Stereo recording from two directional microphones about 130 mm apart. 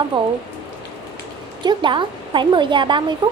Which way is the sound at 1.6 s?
35° right (ahead or behind).